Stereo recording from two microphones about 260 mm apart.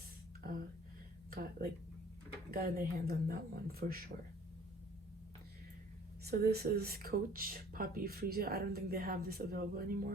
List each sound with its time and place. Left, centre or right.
1.3 s a sound: right
2.5 s speech: right
6.2 s speech: right